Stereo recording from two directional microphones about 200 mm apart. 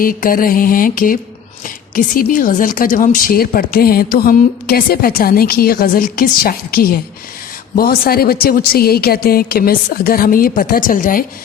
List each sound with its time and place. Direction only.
0.0 s a woman's voice: 45° left (ahead or behind)